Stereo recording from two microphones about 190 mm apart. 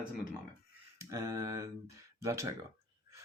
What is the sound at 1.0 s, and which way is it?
Speech, 15° right (ahead or behind).